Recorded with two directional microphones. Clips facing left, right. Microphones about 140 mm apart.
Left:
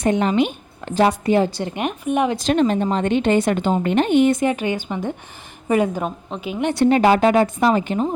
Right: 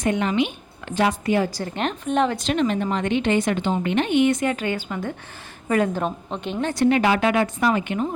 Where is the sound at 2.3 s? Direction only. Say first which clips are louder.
Left 4 dB; 40° left (ahead or behind).